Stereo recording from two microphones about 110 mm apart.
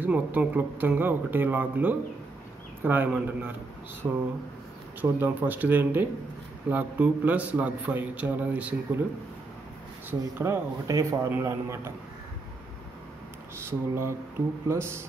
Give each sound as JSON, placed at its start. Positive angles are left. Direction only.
{"t": 0.0, "sound": "a man's voice", "side_deg": -15}
{"t": 10.3, "sound": "a man's voice", "side_deg": -20}
{"t": 13.7, "sound": "a man's voice", "side_deg": -25}